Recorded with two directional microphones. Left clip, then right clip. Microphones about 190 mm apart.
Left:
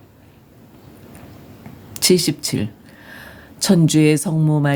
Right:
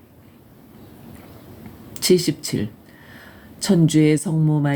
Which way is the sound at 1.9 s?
30° left (ahead or behind).